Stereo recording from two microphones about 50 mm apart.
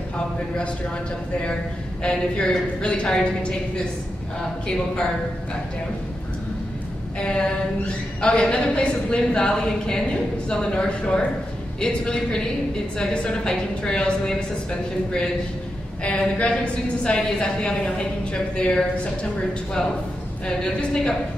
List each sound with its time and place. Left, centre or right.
2.0 s a woman's voice: centre
7.2 s a woman's voice: centre
20.4 s a woman's voice: centre